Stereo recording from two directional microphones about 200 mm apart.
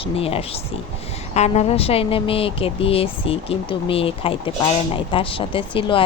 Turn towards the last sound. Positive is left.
turn(degrees=25)  # may be behind; listen again after turning